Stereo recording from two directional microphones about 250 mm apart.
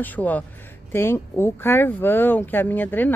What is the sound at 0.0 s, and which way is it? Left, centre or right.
Speech, centre.